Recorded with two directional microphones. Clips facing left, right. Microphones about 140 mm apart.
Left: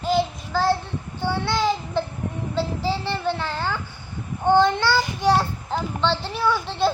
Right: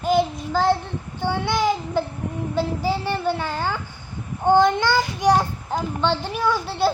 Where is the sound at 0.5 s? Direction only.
15° right (ahead or behind).